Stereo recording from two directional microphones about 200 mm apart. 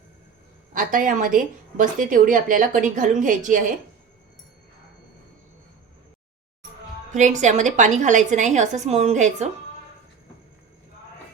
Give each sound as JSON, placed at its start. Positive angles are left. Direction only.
{"t": 0.7, "sound": "a woman's voice", "side_deg": -40}
{"t": 7.1, "sound": "a woman's voice", "side_deg": -35}